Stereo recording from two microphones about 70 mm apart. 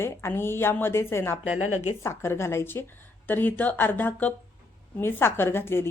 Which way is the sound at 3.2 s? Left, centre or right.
Left.